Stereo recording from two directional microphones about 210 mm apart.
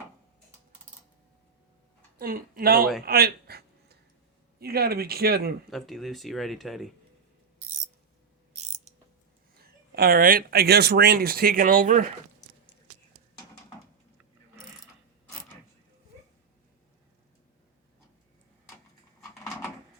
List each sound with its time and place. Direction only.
2.1 s speech: 45° right (ahead or behind)
3.1 s a sound: 50° right (ahead or behind)
4.6 s speech: 45° right (ahead or behind)
5.7 s speech: centre (ahead or behind)
8.5 s ratchet: 35° right (ahead or behind)
9.6 s speech: 45° right (ahead or behind)